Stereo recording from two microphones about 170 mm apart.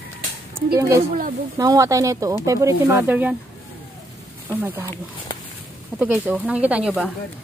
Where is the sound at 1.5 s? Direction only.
20° right (ahead or behind).